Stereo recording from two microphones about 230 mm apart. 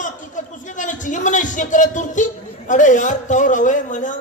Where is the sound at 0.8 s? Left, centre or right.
Left.